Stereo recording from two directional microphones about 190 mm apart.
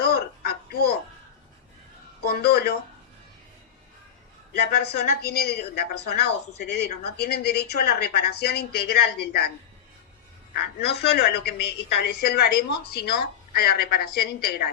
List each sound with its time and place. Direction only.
0.0 s a sound: 55° left (ahead or behind)
2.2 s speech: 55° left (ahead or behind)
4.5 s speech: 60° left (ahead or behind)
10.5 s speech: 60° left (ahead or behind)